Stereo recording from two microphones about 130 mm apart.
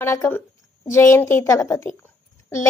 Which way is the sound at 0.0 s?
20° left (ahead or behind).